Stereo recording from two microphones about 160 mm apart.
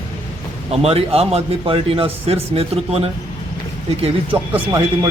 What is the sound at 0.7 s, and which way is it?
A man's voice, 40° right (ahead or behind).